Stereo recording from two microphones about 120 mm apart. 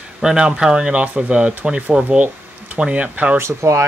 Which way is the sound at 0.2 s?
5° right (ahead or behind).